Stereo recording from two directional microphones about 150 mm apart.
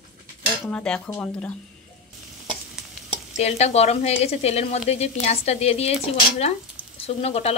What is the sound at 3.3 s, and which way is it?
Speech, 45° left (ahead or behind).